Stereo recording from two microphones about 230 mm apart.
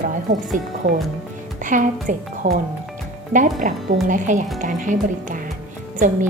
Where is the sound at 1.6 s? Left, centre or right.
Right.